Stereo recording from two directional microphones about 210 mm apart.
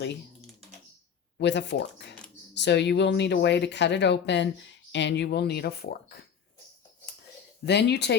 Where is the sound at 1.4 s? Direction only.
55° left (ahead or behind).